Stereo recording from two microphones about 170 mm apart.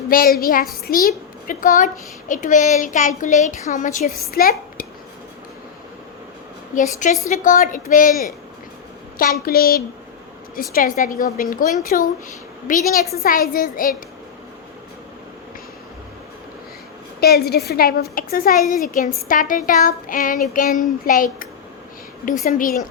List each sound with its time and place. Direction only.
0.1 s a woman's voice: 60° left (ahead or behind)
6.7 s a woman's voice: 50° left (ahead or behind)
9.1 s a woman's voice: 60° left (ahead or behind)
17.2 s a woman's voice: 65° left (ahead or behind)
22.4 s a woman's voice: 55° left (ahead or behind)